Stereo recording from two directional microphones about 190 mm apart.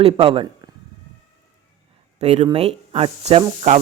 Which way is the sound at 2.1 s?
35° right (ahead or behind).